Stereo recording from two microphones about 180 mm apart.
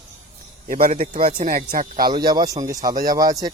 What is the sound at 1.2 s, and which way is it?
Speech, 50° right (ahead or behind).